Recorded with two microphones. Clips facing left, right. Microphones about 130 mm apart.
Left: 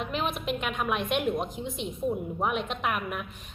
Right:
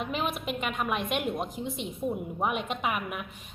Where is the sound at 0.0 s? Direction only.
5° right (ahead or behind).